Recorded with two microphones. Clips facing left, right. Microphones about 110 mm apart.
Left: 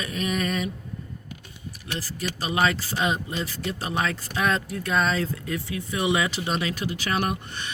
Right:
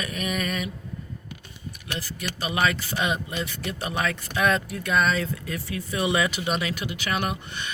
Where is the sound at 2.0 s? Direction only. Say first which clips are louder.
Left 2 dB; 35° left (ahead or behind).